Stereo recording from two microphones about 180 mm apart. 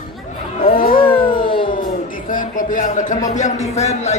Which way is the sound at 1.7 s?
50° left (ahead or behind).